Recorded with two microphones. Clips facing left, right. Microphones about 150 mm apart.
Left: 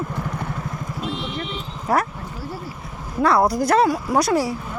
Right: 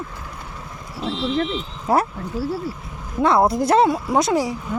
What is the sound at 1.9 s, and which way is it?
Speech, 25° right (ahead or behind).